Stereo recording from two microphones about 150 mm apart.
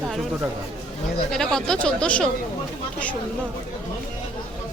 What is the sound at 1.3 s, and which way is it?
A woman's voice, 5° left (ahead or behind).